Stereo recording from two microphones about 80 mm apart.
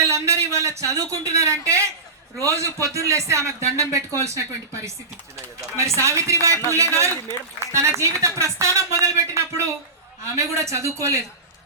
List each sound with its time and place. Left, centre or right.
0.1 s speech: right